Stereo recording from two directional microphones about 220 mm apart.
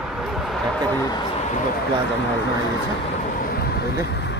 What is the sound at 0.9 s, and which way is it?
Speech, 15° left (ahead or behind).